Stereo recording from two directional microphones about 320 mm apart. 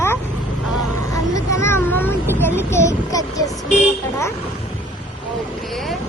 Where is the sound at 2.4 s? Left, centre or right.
Centre.